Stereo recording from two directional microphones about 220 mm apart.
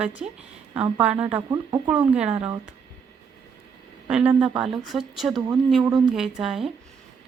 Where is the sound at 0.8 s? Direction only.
20° right (ahead or behind).